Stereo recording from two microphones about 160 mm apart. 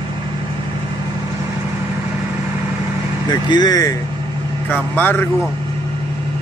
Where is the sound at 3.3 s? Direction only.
25° left (ahead or behind).